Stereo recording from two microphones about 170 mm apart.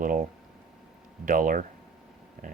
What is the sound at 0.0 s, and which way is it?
Speech, 50° right (ahead or behind).